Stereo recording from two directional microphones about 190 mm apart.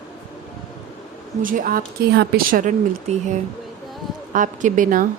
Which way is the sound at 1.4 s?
45° right (ahead or behind).